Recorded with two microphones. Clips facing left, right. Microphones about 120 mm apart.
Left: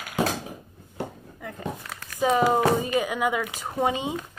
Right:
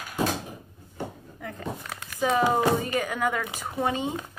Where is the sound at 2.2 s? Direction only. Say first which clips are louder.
Left 2 dB; 15° left (ahead or behind).